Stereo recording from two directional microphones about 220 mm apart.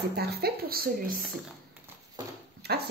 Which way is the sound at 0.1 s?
45° right (ahead or behind).